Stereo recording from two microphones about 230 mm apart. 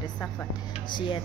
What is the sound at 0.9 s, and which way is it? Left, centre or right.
Speech, left.